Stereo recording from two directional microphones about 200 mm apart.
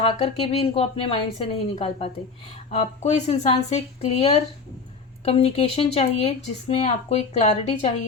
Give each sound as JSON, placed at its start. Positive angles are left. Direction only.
{"t": 0.0, "sound": "speech", "side_deg": 30}